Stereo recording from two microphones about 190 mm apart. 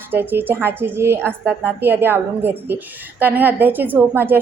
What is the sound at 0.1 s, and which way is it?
A woman's voice, 10° right (ahead or behind).